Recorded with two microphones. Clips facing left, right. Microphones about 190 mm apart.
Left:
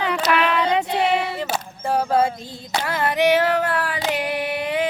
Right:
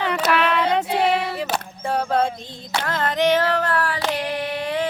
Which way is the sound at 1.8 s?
5° left (ahead or behind).